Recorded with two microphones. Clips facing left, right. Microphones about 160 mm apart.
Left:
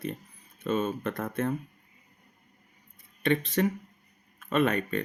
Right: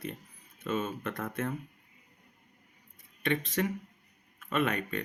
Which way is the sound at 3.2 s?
35° left (ahead or behind).